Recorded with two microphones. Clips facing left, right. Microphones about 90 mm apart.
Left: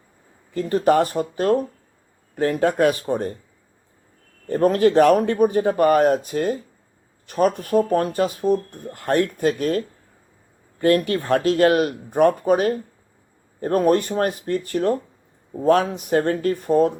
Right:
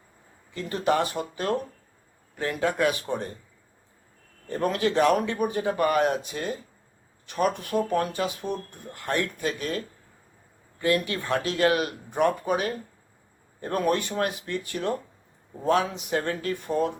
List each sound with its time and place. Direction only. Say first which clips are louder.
0.5 s speech: left 7 dB; 45° left (ahead or behind)
4.4 s speech: left 9 dB; 40° left (ahead or behind)